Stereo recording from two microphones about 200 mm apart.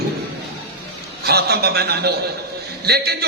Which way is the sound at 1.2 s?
50° right (ahead or behind).